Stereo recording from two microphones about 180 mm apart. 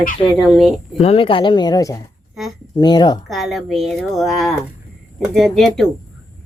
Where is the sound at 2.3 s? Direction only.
Centre (ahead or behind).